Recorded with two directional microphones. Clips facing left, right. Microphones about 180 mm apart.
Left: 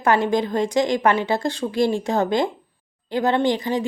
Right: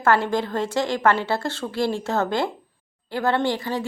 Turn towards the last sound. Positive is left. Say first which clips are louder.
# left 3 dB
turn(degrees=20)  # may be behind; listen again after turning